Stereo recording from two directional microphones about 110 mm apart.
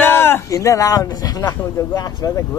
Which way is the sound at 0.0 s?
20° left (ahead or behind).